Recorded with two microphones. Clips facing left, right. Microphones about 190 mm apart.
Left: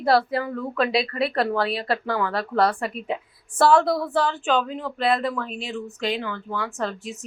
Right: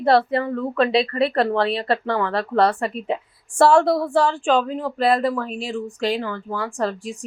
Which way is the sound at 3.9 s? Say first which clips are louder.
Right 4 dB; 30° right (ahead or behind).